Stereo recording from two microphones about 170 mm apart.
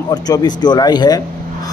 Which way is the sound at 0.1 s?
25° left (ahead or behind).